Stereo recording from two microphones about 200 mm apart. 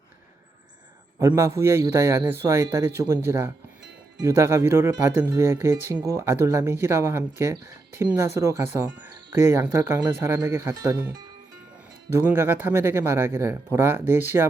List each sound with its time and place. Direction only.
1.2 s speech: 15° right (ahead or behind)